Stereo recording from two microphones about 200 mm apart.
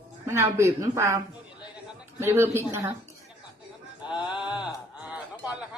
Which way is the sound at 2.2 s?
10° right (ahead or behind).